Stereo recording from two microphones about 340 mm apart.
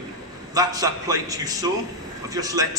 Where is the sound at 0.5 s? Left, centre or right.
Centre.